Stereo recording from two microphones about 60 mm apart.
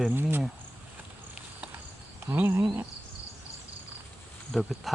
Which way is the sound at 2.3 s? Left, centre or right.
Right.